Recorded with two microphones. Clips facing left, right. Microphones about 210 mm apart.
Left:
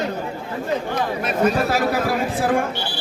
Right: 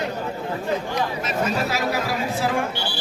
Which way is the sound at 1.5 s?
55° left (ahead or behind).